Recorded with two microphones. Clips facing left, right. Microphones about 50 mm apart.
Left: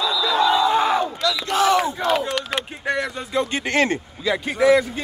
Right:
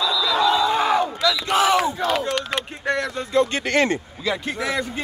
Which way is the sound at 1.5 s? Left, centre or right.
Centre.